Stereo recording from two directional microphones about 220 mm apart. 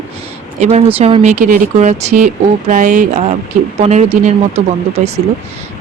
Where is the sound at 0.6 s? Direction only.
30° right (ahead or behind).